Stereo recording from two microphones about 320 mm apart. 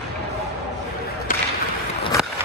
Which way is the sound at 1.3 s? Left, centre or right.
Left.